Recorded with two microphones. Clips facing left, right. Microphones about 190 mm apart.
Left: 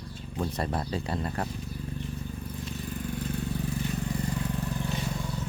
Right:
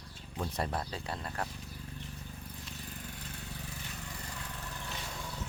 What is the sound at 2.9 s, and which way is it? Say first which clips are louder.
Vehicle: left 12 dB; 60° left (ahead or behind).